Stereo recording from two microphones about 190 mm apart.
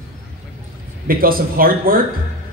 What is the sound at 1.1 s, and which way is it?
Speech, 50° right (ahead or behind).